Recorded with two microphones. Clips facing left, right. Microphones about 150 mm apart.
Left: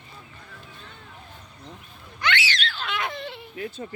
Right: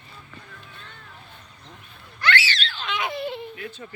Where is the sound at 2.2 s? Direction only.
15° left (ahead or behind).